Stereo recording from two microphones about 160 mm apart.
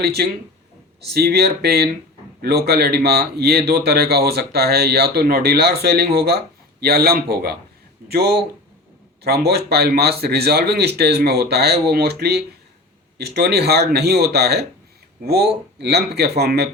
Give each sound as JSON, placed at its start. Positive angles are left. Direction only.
{"t": 0.0, "sound": "speech", "side_deg": -90}